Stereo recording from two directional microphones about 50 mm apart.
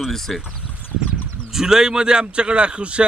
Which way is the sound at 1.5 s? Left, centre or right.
Centre.